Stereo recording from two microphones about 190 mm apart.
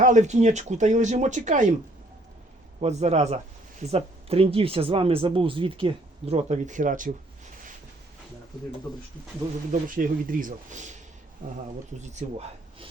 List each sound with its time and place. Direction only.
0.0 s speech: 40° right (ahead or behind)
2.8 s speech: 35° right (ahead or behind)
9.8 s speech: 45° right (ahead or behind)
12.2 s speech: 35° right (ahead or behind)